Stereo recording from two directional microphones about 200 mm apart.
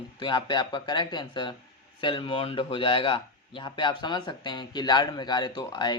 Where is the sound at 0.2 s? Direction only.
20° left (ahead or behind).